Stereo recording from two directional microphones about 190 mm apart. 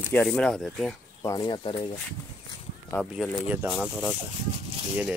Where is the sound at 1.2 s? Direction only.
20° left (ahead or behind).